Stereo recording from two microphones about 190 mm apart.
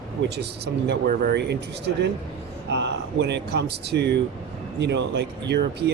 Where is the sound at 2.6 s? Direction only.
70° right (ahead or behind).